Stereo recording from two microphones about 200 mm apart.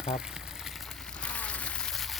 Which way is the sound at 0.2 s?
5° right (ahead or behind).